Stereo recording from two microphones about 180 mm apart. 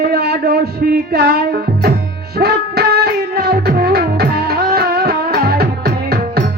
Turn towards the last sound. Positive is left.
turn(degrees=-60)  # may be behind; listen again after turning